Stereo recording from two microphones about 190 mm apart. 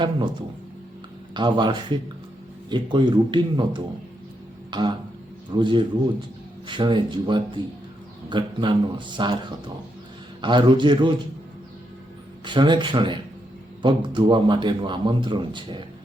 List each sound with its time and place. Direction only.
1.3 s a man's voice: 25° right (ahead or behind)
4.7 s a sound: 25° right (ahead or behind)
5.5 s a man's voice: 25° right (ahead or behind)
10.4 s a man's voice: 25° right (ahead or behind)
12.5 s a man's voice: 25° right (ahead or behind)